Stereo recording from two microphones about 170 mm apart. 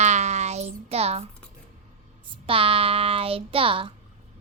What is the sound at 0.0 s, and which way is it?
Child singing, 40° right (ahead or behind).